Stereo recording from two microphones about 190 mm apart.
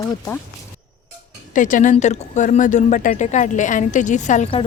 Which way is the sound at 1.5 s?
45° left (ahead or behind).